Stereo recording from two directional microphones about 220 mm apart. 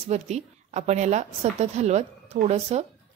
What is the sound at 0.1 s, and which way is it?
A woman's voice, 30° right (ahead or behind).